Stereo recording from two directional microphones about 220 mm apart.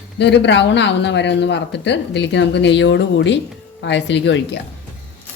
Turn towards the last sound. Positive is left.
turn(degrees=55)  # may be behind; listen again after turning